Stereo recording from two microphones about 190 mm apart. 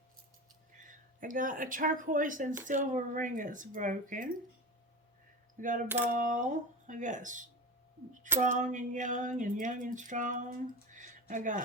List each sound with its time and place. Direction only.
0.8 s speech: 45° right (ahead or behind)
5.5 s speech: 45° right (ahead or behind)